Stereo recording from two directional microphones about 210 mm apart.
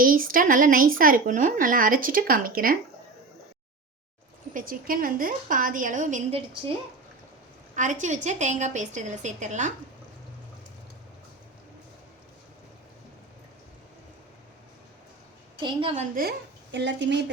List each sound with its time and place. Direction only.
0.0 s speech: 40° right (ahead or behind)
4.5 s speech: 40° right (ahead or behind)
7.8 s speech: 35° right (ahead or behind)
15.6 s a woman's voice: 25° right (ahead or behind)
16.7 s a woman's voice: 55° right (ahead or behind)